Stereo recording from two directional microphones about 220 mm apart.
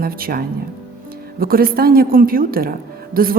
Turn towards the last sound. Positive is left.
turn(degrees=-40)  # may be behind; listen again after turning